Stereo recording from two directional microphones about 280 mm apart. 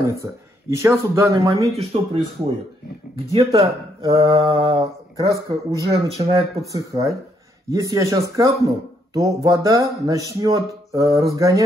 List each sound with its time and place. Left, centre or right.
0.0 s speech: centre
3.6 s speech: centre